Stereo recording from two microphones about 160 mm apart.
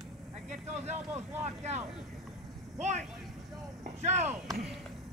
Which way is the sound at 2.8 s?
45° right (ahead or behind).